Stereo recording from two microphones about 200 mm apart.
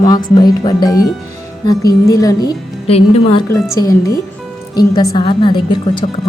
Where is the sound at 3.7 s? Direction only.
15° left (ahead or behind).